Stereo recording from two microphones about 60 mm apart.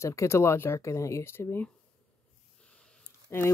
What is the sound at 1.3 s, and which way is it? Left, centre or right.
Speech, left.